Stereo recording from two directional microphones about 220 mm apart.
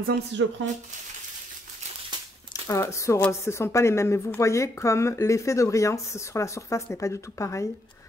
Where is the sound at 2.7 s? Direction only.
15° left (ahead or behind).